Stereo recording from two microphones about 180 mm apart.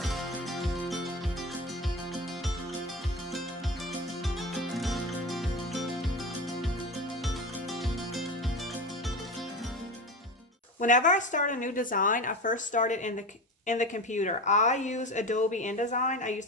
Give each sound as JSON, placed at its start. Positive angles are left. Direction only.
{"t": 0.0, "sound": "music", "side_deg": 0}
{"t": 4.5, "sound": "music", "side_deg": 0}
{"t": 7.7, "sound": "music", "side_deg": 0}
{"t": 10.8, "sound": "speech", "side_deg": 45}